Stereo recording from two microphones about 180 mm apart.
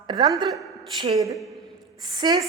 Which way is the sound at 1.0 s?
20° right (ahead or behind).